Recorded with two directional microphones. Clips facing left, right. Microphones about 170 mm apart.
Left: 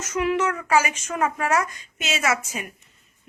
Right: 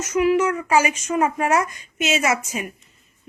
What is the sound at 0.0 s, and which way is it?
Speech, 10° right (ahead or behind).